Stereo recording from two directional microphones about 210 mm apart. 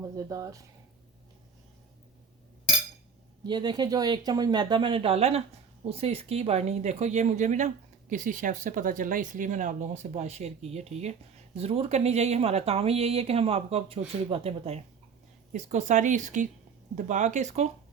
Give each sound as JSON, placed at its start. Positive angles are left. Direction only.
{"t": 0.3, "sound": "speech", "side_deg": -15}
{"t": 3.4, "sound": "a woman's voice", "side_deg": -20}